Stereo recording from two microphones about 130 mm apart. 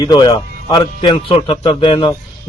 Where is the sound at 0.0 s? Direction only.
35° left (ahead or behind).